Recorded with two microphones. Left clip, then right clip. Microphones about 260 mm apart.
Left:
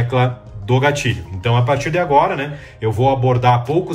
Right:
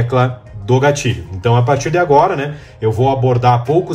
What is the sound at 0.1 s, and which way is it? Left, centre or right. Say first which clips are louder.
Speech: right 3 dB; centre.